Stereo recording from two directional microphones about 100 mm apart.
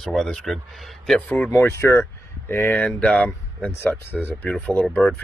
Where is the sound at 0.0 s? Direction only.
5° left (ahead or behind).